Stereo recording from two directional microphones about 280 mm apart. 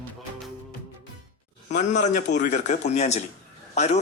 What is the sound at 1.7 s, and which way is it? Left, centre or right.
Speech, left.